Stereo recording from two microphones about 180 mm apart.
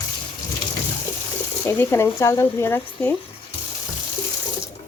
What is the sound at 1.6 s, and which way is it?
Speech, 15° left (ahead or behind).